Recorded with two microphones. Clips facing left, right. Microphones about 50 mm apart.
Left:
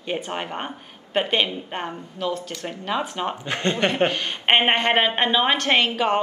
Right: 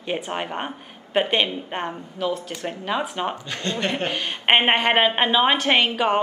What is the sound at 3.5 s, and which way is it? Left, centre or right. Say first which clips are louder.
Speech: left 3 dB; left.